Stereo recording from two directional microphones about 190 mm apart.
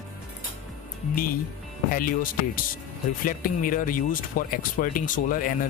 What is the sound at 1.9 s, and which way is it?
Speech, 45° left (ahead or behind).